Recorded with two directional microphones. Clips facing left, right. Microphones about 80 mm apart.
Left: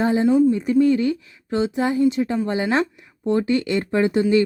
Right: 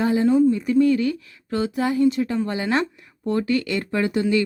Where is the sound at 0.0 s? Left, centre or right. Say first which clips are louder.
Left 1 dB; left.